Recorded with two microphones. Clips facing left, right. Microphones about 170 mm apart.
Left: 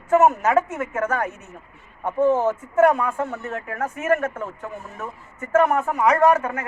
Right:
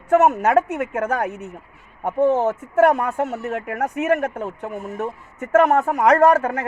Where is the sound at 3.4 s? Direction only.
70° right (ahead or behind).